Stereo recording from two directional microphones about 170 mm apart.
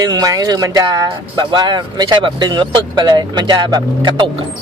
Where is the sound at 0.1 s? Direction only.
20° right (ahead or behind).